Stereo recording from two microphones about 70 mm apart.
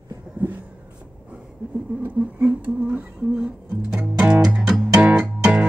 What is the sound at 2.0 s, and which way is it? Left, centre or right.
Speech, right.